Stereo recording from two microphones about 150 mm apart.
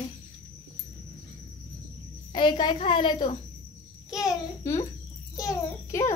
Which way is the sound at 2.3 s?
30° left (ahead or behind).